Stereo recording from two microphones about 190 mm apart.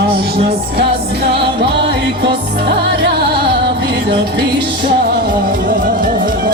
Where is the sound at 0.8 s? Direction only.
60° right (ahead or behind).